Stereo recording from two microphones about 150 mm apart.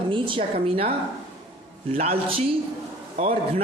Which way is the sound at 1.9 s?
40° right (ahead or behind).